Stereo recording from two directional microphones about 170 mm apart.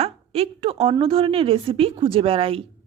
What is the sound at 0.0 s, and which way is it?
A woman's voice, 35° right (ahead or behind).